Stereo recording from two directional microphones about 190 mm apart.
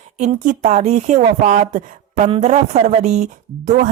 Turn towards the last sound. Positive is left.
turn(degrees=-40)  # may be behind; listen again after turning